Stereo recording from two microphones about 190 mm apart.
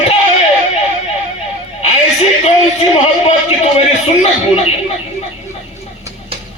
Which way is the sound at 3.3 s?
35° left (ahead or behind).